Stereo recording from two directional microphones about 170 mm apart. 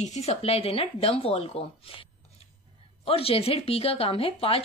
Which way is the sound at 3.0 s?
35° left (ahead or behind).